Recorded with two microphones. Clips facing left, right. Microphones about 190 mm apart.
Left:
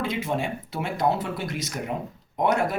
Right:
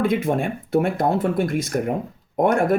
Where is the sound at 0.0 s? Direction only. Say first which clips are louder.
Right 7 dB; 55° right (ahead or behind).